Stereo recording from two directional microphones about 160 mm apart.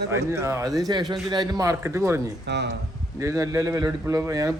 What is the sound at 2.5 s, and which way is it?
Speech, 90° right.